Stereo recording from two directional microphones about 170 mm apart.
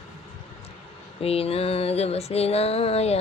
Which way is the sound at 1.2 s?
35° left (ahead or behind).